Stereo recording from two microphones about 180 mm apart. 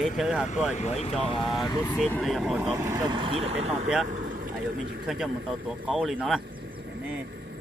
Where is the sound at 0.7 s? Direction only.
40° left (ahead or behind).